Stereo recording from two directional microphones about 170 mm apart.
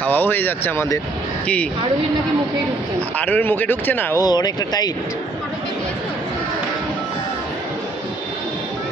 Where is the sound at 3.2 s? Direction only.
10° left (ahead or behind).